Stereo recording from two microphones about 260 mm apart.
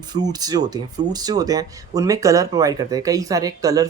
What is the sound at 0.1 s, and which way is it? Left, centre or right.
Speech, centre.